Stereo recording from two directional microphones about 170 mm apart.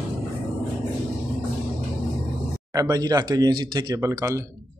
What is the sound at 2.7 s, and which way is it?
Speech, 20° right (ahead or behind).